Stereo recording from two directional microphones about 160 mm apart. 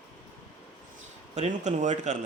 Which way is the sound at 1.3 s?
45° right (ahead or behind).